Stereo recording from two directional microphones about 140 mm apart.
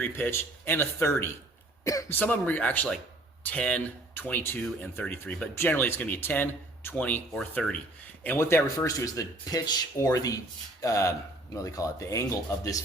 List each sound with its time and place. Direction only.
0.0 s speech: 15° left (ahead or behind)